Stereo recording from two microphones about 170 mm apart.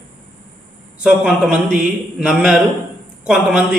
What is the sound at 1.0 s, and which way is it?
A man's voice, 5° right (ahead or behind).